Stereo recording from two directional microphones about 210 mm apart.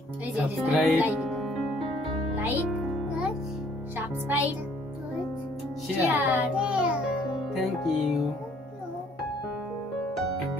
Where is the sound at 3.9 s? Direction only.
10° right (ahead or behind).